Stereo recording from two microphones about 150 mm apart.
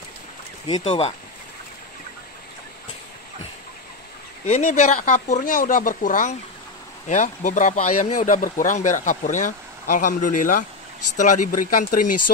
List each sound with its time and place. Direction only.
0.7 s speech: 25° left (ahead or behind)
4.5 s speech: 50° left (ahead or behind)